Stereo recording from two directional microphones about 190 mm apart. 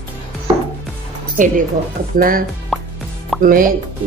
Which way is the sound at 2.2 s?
50° right (ahead or behind).